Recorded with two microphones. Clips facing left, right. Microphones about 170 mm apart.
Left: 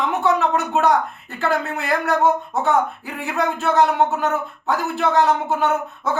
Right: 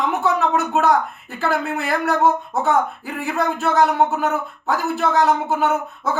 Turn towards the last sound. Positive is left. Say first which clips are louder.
# even
turn(degrees=-5)  # may be behind; listen again after turning